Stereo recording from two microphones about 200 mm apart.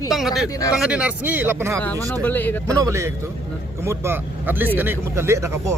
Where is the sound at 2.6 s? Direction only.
15° right (ahead or behind).